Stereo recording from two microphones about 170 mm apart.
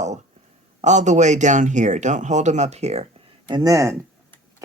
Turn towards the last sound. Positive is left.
turn(degrees=-20)  # may be behind; listen again after turning